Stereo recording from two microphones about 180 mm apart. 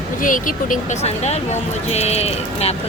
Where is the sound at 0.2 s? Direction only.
45° left (ahead or behind).